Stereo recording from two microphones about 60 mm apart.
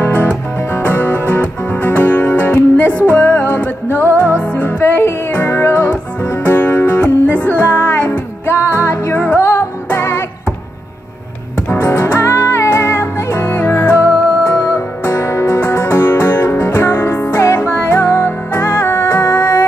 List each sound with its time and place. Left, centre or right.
0.0 s music: left
11.7 s music: left